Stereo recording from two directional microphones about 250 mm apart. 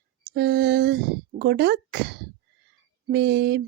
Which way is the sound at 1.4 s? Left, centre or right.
Right.